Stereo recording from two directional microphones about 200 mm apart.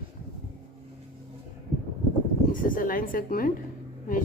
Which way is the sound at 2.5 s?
40° left (ahead or behind).